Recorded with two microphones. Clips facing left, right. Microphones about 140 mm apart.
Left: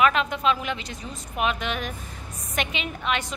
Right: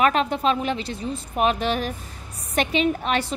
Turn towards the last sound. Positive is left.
turn(degrees=-35)  # may be behind; listen again after turning